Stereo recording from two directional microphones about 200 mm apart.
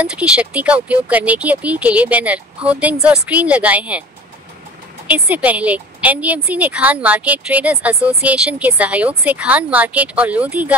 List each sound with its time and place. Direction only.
0.0 s a woman's voice: 5° right (ahead or behind)
5.0 s a woman's voice: 5° right (ahead or behind)